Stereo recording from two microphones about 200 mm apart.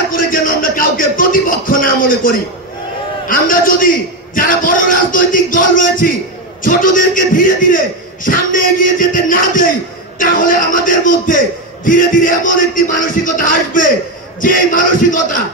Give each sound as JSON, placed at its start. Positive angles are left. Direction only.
{"t": 0.1, "sound": "a man's voice", "side_deg": 45}